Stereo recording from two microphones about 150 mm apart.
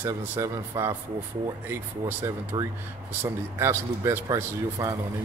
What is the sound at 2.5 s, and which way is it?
Speech, 30° right (ahead or behind).